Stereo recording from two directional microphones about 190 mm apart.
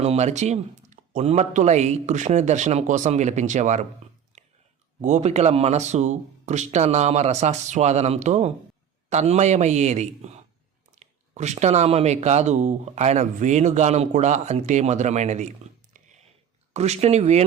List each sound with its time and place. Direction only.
0.0 s speech: 35° right (ahead or behind)
4.3 s whispering: 35° right (ahead or behind)
4.9 s speech: 35° right (ahead or behind)